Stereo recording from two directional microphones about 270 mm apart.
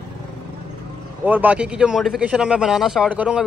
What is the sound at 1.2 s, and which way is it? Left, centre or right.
Speech, centre.